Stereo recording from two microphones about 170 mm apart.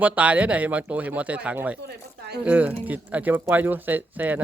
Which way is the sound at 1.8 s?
70° right (ahead or behind).